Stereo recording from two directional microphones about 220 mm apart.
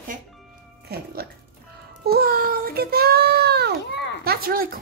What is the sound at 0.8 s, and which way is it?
Music, 45° right (ahead or behind).